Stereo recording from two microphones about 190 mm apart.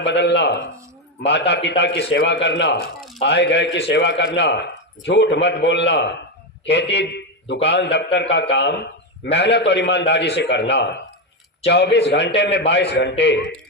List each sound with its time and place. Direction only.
0.0 s a man's voice: 65° left (ahead or behind)